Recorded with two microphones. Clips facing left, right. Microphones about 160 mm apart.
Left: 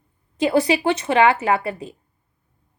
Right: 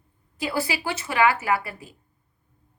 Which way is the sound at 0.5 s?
20° left (ahead or behind).